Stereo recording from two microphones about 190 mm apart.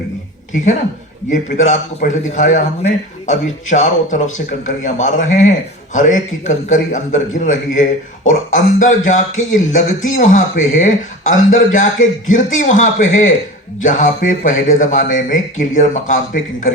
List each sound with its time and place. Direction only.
0.5 s a man's voice: 40° left (ahead or behind)